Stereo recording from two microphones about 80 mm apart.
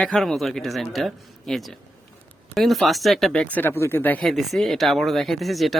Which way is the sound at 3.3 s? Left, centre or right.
Centre.